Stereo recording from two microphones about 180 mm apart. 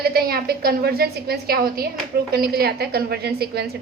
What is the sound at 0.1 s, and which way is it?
A woman's voice, 55° right (ahead or behind).